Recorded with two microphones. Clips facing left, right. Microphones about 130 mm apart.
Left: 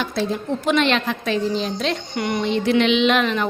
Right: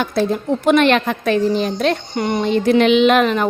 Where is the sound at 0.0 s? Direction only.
50° right (ahead or behind).